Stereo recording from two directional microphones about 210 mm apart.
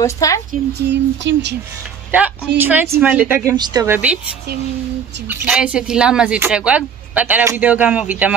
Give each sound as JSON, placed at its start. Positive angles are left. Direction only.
{"t": 0.0, "sound": "a woman's voice", "side_deg": 15}
{"t": 0.5, "sound": "speech", "side_deg": -55}
{"t": 2.0, "sound": "speech", "side_deg": -10}
{"t": 5.3, "sound": "speech", "side_deg": -5}